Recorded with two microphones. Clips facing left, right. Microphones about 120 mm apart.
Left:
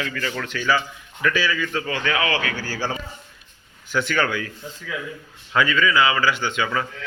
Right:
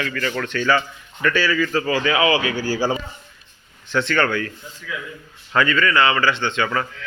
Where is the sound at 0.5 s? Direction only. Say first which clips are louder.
Right 2 dB; 5° left (ahead or behind); by 3.0 s 10° right (ahead or behind).